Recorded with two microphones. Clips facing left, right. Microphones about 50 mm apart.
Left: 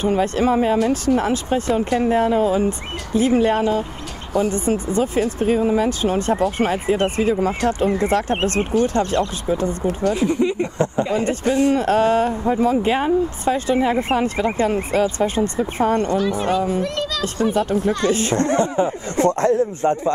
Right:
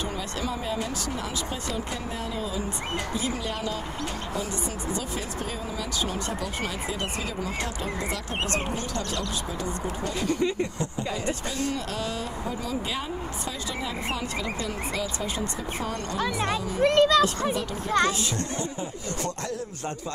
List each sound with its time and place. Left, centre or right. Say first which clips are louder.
0.0 s speech: left 13 dB; left
10.1 s speech: left 7 dB; centre
10.8 s speech: left 11 dB; left
16.2 s speech: left 7 dB; right
16.5 s speech: left 10 dB; left
16.8 s speech: right 5 dB; right
17.6 s speech: left 5 dB; left